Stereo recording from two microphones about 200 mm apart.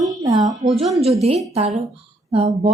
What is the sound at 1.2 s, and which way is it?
A woman's voice, 30° right (ahead or behind).